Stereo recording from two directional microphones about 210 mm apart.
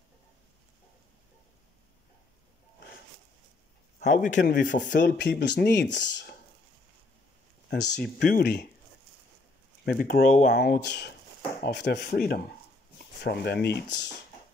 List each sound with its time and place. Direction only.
4.0 s a man's voice: 35° left (ahead or behind)
4.4 s speech: 50° left (ahead or behind)
8.0 s speech: 45° left (ahead or behind)
9.8 s speech: 45° left (ahead or behind)